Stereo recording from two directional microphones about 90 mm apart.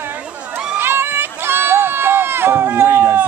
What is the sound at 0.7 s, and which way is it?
Run, 25° right (ahead or behind).